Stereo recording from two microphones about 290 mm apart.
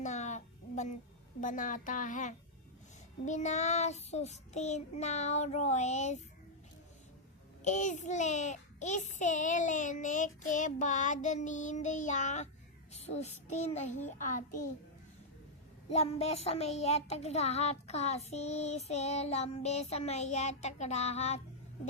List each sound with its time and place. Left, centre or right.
0.0 s a sound: left
1.4 s a child's voice: left
7.6 s a child's voice: left
15.9 s a child's voice: left